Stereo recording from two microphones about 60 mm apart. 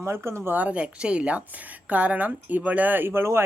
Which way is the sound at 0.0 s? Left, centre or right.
Right.